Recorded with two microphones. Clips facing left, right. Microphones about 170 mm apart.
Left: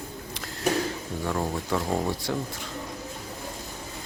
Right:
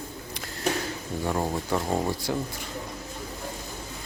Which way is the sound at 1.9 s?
Centre (ahead or behind).